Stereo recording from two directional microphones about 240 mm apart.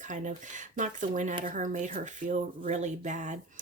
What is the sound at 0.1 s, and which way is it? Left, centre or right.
Speech, right.